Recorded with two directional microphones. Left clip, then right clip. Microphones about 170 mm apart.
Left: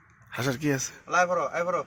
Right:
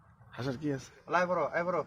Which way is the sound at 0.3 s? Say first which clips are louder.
Left 8 dB; 20° left (ahead or behind).